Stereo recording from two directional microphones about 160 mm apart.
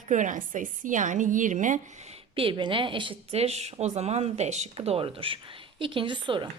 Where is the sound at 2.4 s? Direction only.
30° right (ahead or behind).